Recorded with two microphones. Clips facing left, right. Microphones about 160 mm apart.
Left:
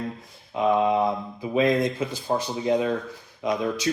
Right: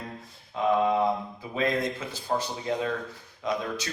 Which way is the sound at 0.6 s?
15° left (ahead or behind).